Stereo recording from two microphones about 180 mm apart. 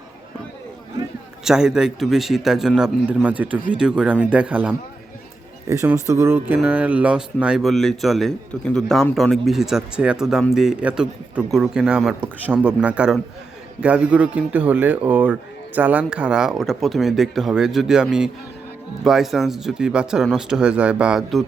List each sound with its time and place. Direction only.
1.5 s speech: 5° right (ahead or behind)